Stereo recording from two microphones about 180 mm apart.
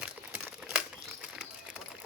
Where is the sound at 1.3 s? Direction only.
5° right (ahead or behind).